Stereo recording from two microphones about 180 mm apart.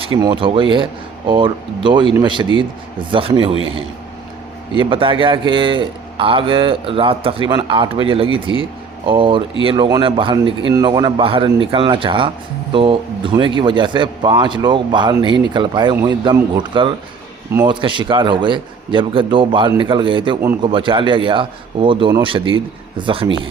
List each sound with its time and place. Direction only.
0.0 s a man's voice: 30° right (ahead or behind)